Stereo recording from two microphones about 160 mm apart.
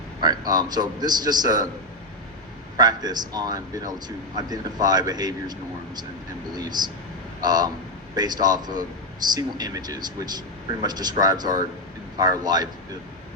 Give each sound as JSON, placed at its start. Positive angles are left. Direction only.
{"t": 0.2, "sound": "a man's voice", "side_deg": -25}
{"t": 2.7, "sound": "a man's voice", "side_deg": -25}